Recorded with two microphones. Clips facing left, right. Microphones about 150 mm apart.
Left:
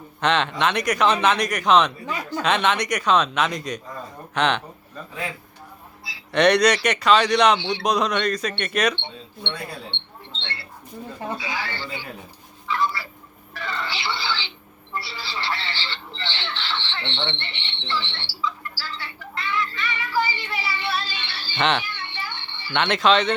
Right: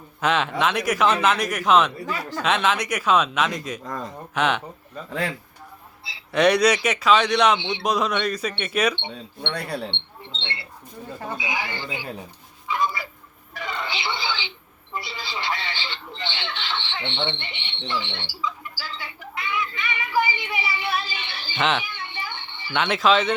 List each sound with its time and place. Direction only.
0.2 s speech: 5° right (ahead or behind)
6.3 s speech: 5° right (ahead or behind)
9.4 s speech: 70° right (ahead or behind)
10.3 s speech: 20° right (ahead or behind)
12.6 s a sound: 15° right (ahead or behind)
13.5 s speech: 15° right (ahead or behind)
14.9 s a sound: 20° right (ahead or behind)
21.6 s speech: centre (ahead or behind)
21.8 s a sound: 15° right (ahead or behind)
22.7 s speech: centre (ahead or behind)